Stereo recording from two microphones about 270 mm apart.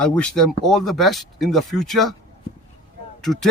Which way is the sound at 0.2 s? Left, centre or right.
Centre.